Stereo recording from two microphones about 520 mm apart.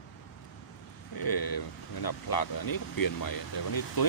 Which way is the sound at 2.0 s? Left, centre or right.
Left.